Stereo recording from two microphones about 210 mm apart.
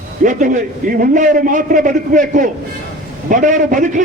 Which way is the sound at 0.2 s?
40° right (ahead or behind).